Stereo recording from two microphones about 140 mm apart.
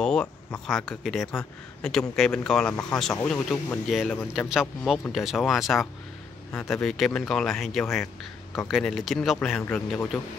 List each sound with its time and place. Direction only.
0.0 s speech: 5° left (ahead or behind)